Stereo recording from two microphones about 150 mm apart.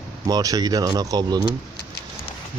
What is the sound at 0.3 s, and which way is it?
Speech, 25° right (ahead or behind).